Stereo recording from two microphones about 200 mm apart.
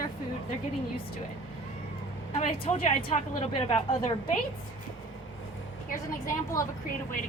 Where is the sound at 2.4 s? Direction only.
30° left (ahead or behind).